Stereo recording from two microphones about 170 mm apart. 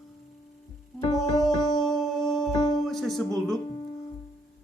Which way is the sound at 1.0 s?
20° left (ahead or behind).